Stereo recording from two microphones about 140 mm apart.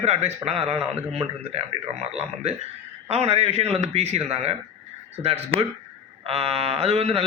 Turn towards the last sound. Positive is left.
turn(degrees=-50)  # may be behind; listen again after turning